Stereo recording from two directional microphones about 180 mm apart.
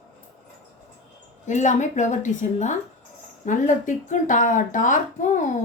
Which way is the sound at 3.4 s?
45° left (ahead or behind).